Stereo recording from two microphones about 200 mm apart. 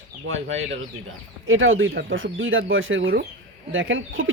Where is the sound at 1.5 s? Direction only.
80° right.